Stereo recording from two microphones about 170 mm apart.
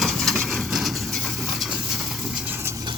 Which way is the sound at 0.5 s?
Centre (ahead or behind).